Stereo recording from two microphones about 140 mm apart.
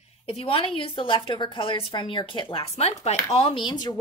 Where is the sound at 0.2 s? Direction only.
45° left (ahead or behind).